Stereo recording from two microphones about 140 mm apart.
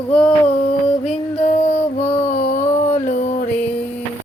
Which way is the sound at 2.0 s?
55° left (ahead or behind).